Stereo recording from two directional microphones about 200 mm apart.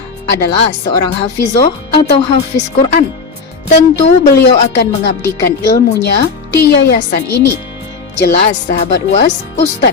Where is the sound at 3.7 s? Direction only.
40° left (ahead or behind).